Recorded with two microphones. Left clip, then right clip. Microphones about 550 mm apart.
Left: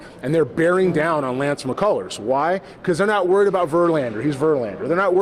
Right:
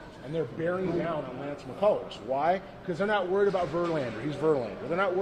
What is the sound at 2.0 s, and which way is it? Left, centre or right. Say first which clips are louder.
A man's voice: left 8 dB; left.